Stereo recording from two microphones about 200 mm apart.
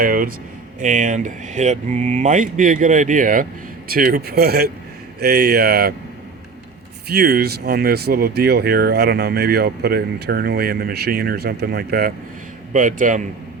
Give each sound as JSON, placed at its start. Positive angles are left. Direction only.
{"t": 0.0, "sound": "speech", "side_deg": -45}
{"t": 7.1, "sound": "speech", "side_deg": -50}